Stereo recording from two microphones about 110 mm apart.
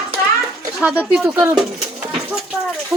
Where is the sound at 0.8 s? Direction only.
10° right (ahead or behind).